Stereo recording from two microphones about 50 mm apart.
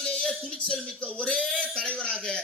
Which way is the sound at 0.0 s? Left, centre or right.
Centre.